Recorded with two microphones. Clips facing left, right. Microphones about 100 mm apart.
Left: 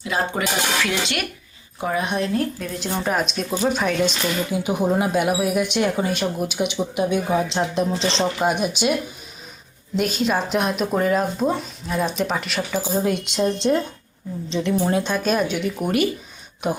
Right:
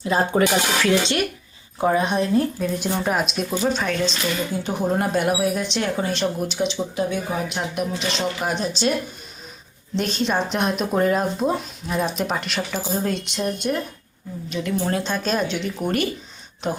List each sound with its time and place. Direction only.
0.0 s dishes: 35° right (ahead or behind)
1.8 s speech: 25° right (ahead or behind)
2.8 s speech: 5° right (ahead or behind)
3.5 s speech: 10° left (ahead or behind)
12.8 s speech: 15° left (ahead or behind)
14.8 s speech: 15° left (ahead or behind)